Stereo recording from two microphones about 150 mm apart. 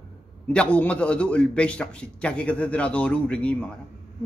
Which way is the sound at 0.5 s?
10° left (ahead or behind).